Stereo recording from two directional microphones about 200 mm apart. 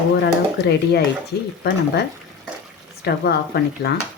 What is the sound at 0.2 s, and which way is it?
Speech, 55° left (ahead or behind).